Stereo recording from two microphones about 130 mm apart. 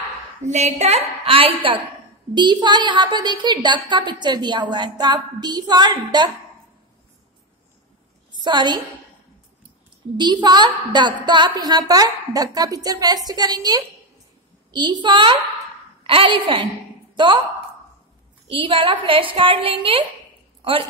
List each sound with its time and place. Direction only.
0.4 s a woman's voice: 60° right (ahead or behind); by 6.3 s 35° right (ahead or behind)
8.3 s a woman's voice: 35° right (ahead or behind)
10.1 s a woman's voice: 35° right (ahead or behind)
18.5 s a woman's voice: 40° right (ahead or behind)